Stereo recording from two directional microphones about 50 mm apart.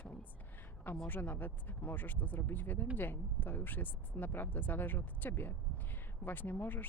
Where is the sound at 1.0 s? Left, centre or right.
Left.